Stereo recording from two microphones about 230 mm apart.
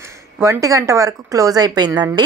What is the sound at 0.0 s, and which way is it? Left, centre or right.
Speech, centre.